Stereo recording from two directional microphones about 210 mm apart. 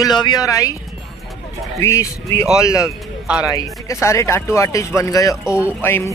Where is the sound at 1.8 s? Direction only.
15° left (ahead or behind).